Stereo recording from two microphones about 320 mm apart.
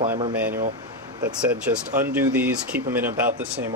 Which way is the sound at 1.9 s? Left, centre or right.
Centre.